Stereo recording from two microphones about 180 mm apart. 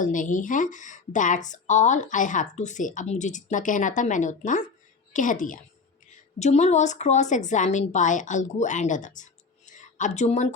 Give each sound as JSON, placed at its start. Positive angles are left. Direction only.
{"t": 0.0, "sound": "a woman's voice", "side_deg": 45}